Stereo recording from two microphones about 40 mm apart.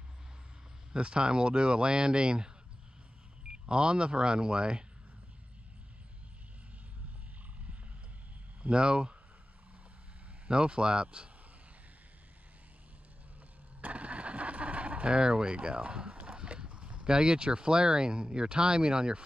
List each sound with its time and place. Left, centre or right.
0.9 s speech: right
8.6 s speech: right
10.5 s speech: right
13.7 s a sound: right